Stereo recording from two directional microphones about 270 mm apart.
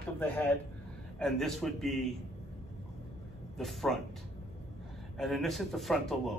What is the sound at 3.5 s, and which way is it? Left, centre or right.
Speech, centre.